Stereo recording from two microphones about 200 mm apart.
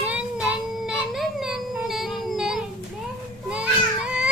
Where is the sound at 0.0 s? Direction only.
5° right (ahead or behind).